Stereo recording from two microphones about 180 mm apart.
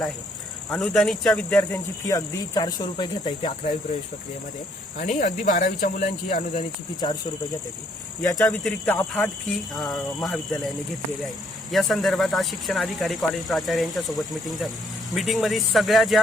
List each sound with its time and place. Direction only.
0.7 s speech: centre (ahead or behind)
1.7 s speech: 20° left (ahead or behind)
4.9 s speech: 45° left (ahead or behind)
6.5 s speech: 25° left (ahead or behind)
8.4 s speech: 5° left (ahead or behind)
9.7 s speech: centre (ahead or behind)
11.7 s speech: centre (ahead or behind)